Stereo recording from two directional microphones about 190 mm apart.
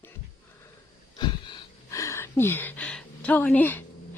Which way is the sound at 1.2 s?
20° left (ahead or behind).